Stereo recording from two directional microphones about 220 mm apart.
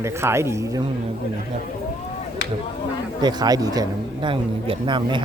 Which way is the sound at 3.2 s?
20° right (ahead or behind).